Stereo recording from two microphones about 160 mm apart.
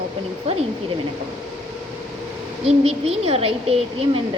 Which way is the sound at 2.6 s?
40° right (ahead or behind).